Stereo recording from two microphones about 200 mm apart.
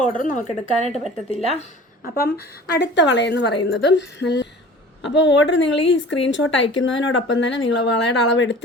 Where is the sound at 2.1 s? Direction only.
50° left (ahead or behind).